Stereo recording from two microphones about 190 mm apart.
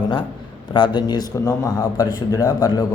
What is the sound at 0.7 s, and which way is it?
Speech, 25° left (ahead or behind).